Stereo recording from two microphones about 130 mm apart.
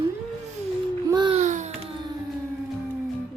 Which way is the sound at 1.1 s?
35° right (ahead or behind).